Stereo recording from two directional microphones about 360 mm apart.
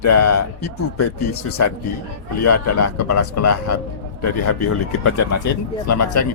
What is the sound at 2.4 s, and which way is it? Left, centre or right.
Speech, left.